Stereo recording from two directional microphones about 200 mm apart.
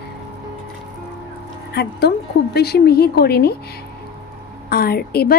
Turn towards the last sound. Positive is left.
turn(degrees=50)  # may be behind; listen again after turning